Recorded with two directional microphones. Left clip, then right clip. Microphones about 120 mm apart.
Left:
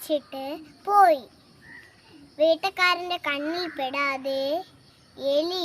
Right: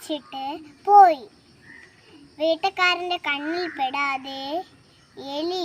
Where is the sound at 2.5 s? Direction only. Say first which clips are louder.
Right 4 dB; 30° left (ahead or behind).